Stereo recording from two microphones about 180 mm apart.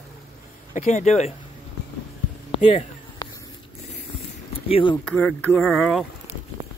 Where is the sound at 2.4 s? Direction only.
30° left (ahead or behind).